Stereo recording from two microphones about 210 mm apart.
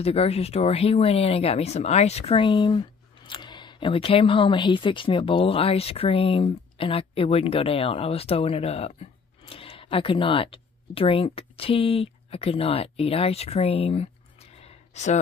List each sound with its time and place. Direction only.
0.0 s speech: 30° left (ahead or behind)